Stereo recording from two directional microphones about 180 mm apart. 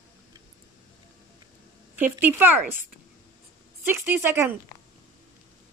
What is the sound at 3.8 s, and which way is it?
Speech, 10° right (ahead or behind).